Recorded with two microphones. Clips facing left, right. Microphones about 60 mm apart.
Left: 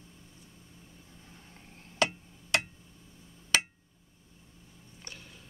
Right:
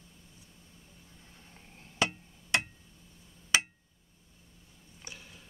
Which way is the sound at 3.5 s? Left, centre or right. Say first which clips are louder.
Even; centre.